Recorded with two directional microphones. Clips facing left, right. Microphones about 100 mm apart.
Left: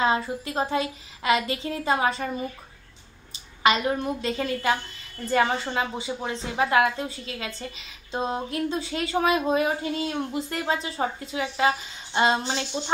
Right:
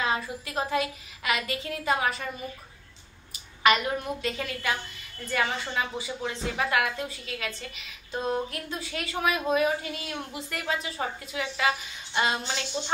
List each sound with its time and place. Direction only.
0.0 s speech: 30° left (ahead or behind)
3.6 s speech: 25° left (ahead or behind)